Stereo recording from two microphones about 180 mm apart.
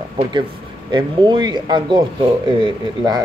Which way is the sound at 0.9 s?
25° right (ahead or behind).